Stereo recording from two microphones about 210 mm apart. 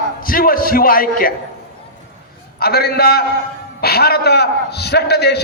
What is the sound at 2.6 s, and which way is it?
A man's voice, 50° left (ahead or behind).